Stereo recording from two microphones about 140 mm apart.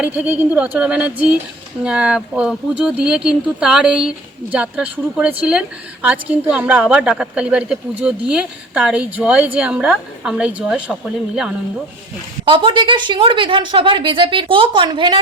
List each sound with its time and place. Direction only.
0.0 s a woman's voice: 10° right (ahead or behind)
12.5 s speech: 35° right (ahead or behind)